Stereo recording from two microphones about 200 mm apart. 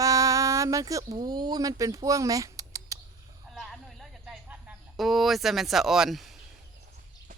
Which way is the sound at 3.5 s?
Centre (ahead or behind).